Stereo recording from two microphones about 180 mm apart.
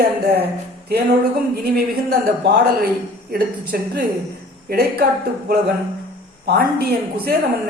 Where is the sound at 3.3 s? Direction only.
55° right (ahead or behind).